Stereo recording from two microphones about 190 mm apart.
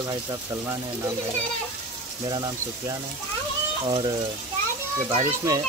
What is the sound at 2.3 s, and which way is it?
Speech, 20° right (ahead or behind).